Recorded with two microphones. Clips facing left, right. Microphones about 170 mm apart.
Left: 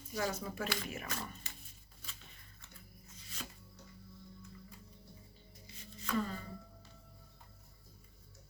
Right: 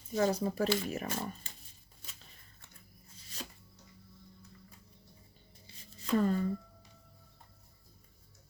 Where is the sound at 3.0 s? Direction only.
35° right (ahead or behind).